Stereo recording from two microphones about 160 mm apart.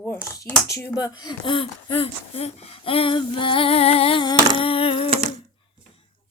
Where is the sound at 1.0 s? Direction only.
25° left (ahead or behind).